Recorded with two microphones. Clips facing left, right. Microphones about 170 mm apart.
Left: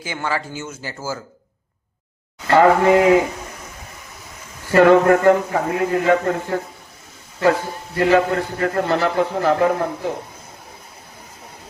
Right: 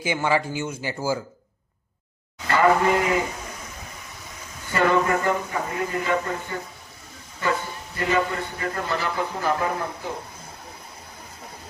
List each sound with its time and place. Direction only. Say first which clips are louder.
0.0 s speech: right 2 dB; 15° right (ahead or behind)
2.5 s a man's voice: left 6 dB; 70° left (ahead or behind)
4.7 s a man's voice: left 9 dB; 70° left (ahead or behind)
7.9 s a man's voice: left 8 dB; 75° left (ahead or behind)